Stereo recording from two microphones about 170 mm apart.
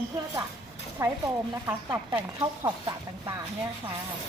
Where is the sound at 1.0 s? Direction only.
15° right (ahead or behind).